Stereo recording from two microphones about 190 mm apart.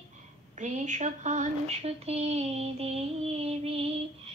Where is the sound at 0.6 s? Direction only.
40° right (ahead or behind).